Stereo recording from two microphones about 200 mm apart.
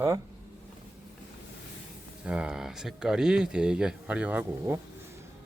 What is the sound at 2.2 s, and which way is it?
Speech, 5° right (ahead or behind).